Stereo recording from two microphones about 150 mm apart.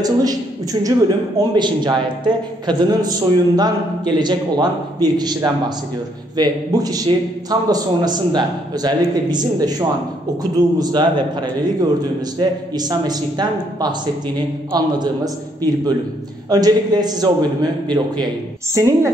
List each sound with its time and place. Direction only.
0.0 s a man's voice: 25° right (ahead or behind)
15.0 s a man's voice: 25° right (ahead or behind)